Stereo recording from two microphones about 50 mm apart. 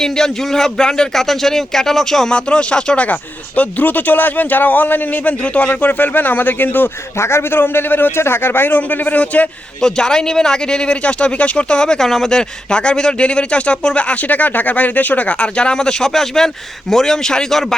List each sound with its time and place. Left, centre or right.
0.0 s speech: centre
2.3 s speech: left
7.2 s a man's voice: left
8.8 s speech: left
9.8 s speech: centre